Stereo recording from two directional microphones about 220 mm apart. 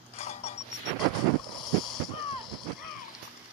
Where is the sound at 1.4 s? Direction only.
Centre (ahead or behind).